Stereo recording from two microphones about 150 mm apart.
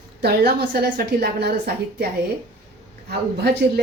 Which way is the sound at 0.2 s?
85° right.